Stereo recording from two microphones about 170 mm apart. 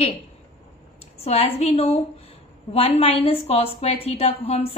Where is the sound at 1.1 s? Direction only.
35° left (ahead or behind).